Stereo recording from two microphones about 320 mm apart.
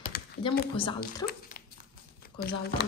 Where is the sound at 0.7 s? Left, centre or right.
Centre.